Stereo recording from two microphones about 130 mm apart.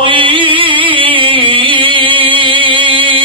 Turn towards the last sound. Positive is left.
turn(degrees=-40)  # may be behind; listen again after turning